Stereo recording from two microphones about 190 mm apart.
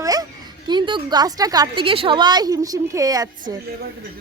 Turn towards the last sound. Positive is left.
turn(degrees=-20)  # may be behind; listen again after turning